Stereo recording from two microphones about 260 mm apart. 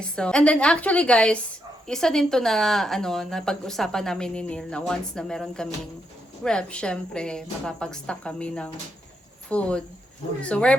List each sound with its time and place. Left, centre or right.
0.0 s speech: centre